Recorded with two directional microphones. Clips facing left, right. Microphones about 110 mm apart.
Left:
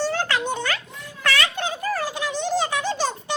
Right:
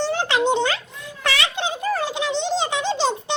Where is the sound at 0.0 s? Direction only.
20° right (ahead or behind).